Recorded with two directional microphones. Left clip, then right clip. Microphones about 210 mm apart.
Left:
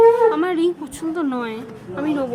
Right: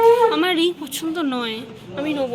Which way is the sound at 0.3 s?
10° left (ahead or behind).